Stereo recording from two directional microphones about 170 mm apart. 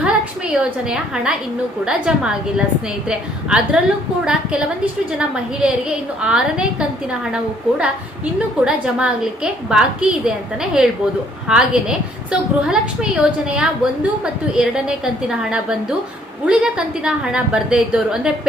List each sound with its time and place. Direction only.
0.0 s a woman's voice: 5° right (ahead or behind)
5.1 s a woman's voice: 5° right (ahead or behind)